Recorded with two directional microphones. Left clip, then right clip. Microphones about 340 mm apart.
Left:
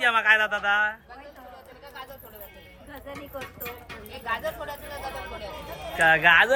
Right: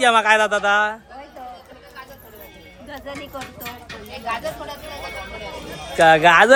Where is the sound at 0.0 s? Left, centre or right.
Centre.